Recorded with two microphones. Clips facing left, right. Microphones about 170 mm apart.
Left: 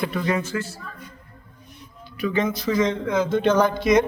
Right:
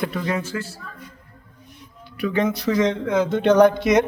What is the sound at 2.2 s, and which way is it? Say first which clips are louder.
Speech: right 1 dB; 65° right (ahead or behind).